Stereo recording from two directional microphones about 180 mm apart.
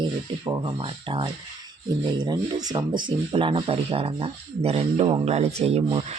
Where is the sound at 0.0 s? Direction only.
20° right (ahead or behind).